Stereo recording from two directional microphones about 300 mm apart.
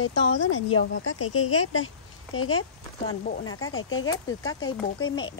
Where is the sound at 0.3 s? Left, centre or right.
Left.